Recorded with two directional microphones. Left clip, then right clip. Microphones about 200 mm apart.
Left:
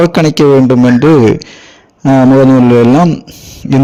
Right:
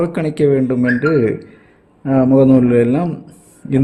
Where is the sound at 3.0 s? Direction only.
30° left (ahead or behind).